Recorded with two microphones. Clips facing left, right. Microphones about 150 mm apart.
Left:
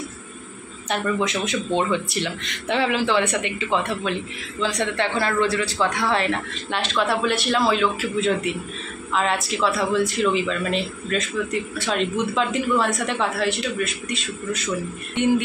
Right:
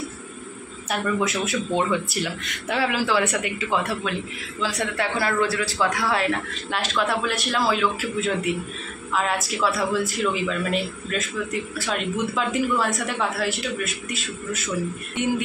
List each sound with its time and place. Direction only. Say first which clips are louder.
0.8 s speech: left 1 dB; 5° right (ahead or behind)